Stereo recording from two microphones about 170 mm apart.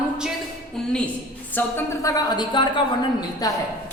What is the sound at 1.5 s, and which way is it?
A woman's voice, 15° left (ahead or behind).